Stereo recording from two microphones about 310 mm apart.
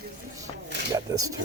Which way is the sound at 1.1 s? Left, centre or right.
Centre.